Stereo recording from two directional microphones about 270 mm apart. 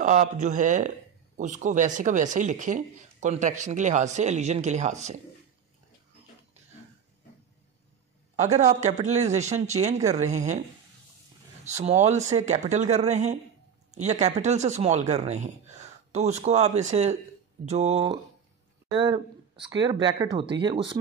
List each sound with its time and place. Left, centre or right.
0.0 s speech: right
8.4 s speech: right
11.6 s speech: right